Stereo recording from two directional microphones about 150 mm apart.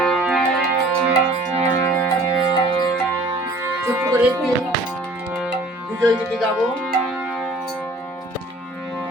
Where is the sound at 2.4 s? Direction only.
30° left (ahead or behind).